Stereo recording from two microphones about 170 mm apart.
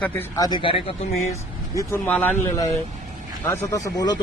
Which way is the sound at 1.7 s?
15° left (ahead or behind).